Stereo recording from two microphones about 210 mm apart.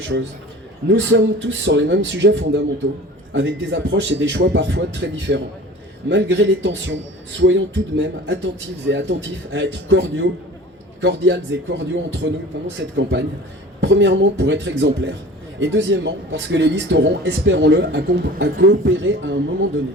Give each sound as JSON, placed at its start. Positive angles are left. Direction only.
{"t": 0.9, "sound": "speech", "side_deg": -60}